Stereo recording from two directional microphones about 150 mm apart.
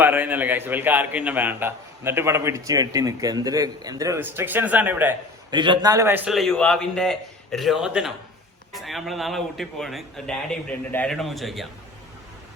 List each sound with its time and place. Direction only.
0.0 s a man's voice: 10° right (ahead or behind)
5.5 s a man's voice: 30° right (ahead or behind); by 6.3 s 15° right (ahead or behind)
6.3 s a man's voice: centre (ahead or behind)